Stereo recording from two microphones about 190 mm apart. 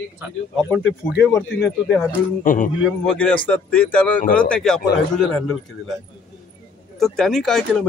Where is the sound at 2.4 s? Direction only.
45° left (ahead or behind).